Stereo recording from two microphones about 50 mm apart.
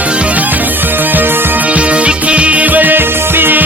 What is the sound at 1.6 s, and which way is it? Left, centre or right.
Music, right.